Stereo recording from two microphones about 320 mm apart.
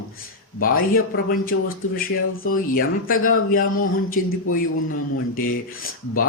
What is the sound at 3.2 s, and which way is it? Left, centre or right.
A man's voice, left.